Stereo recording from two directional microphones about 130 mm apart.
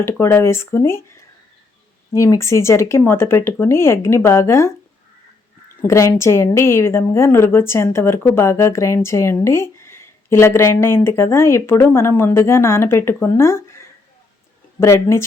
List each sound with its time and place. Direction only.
0.0 s a woman's voice: 20° left (ahead or behind)
5.9 s a woman's voice: 20° left (ahead or behind)
14.8 s a woman's voice: 20° left (ahead or behind)